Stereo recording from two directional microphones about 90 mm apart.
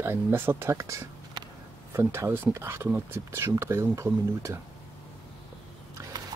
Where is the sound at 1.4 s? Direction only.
55° right (ahead or behind).